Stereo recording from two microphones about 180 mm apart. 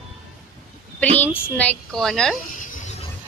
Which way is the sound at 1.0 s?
10° left (ahead or behind).